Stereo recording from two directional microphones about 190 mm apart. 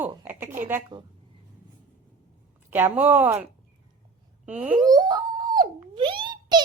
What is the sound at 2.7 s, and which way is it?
Speech, 10° right (ahead or behind).